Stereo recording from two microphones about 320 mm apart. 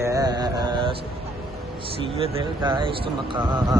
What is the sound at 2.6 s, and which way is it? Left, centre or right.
Speech, centre.